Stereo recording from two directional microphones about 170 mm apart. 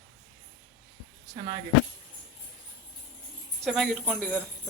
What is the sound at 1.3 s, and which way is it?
Speech, 35° right (ahead or behind).